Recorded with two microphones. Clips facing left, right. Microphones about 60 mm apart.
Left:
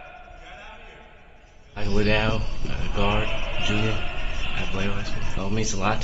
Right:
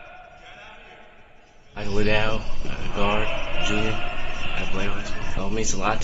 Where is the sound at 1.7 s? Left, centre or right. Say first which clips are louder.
Even; centre.